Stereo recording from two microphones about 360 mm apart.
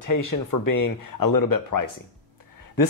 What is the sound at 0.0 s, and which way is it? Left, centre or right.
Speech, left.